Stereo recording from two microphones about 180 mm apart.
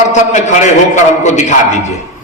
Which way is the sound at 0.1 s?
40° left (ahead or behind).